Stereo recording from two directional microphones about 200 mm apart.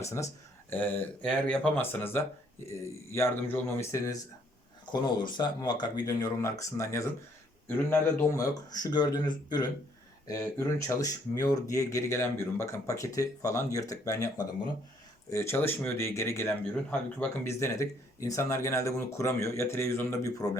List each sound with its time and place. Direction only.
0.0 s speech: 15° left (ahead or behind)
8.4 s speech: 20° left (ahead or behind)